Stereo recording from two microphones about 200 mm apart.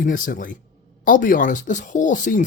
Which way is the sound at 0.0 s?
45° left (ahead or behind).